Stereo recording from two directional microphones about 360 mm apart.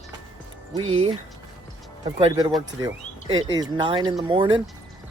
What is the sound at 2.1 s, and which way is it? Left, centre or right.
Speech, centre.